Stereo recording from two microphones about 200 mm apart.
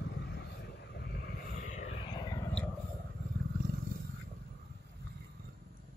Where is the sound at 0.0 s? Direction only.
60° left (ahead or behind); by 2.4 s 20° left (ahead or behind).